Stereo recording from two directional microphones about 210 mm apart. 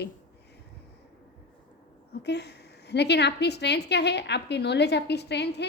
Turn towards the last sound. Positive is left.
turn(degrees=55)  # may be behind; listen again after turning